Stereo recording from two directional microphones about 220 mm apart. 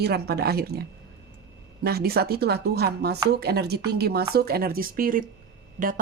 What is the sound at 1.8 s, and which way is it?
A woman's voice, 45° right (ahead or behind).